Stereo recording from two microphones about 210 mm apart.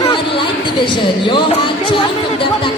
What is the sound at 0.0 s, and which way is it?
Speech, 25° left (ahead or behind).